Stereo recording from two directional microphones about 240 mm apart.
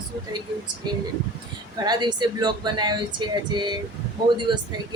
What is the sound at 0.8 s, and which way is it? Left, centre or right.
Speech, centre.